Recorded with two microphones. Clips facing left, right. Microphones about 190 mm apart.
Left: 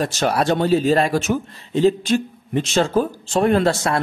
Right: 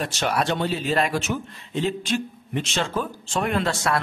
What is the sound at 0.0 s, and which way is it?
Speech, 40° left (ahead or behind).